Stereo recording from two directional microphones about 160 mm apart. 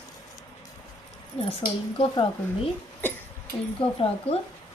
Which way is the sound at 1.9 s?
30° left (ahead or behind).